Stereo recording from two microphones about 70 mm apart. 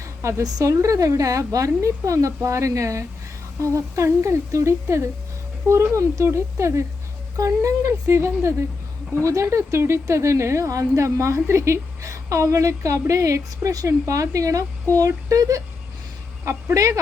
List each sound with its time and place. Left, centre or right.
0.0 s a sound: right
0.6 s a woman's voice: right
16.7 s a woman's voice: right